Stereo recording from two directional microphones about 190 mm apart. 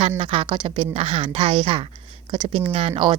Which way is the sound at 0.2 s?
25° right (ahead or behind).